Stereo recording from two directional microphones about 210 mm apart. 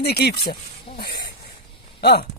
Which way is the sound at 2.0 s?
50° left (ahead or behind).